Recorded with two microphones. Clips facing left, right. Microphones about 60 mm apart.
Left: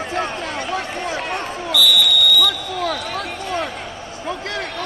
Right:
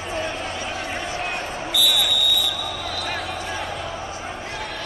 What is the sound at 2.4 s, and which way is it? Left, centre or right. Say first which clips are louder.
Basketball bounce: left 6 dB; left.